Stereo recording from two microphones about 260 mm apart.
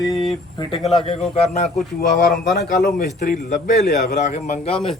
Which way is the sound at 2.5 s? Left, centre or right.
Left.